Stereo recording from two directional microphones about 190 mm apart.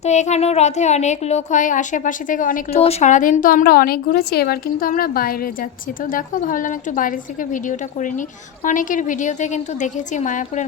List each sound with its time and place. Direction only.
0.0 s a child's voice: 35° left (ahead or behind)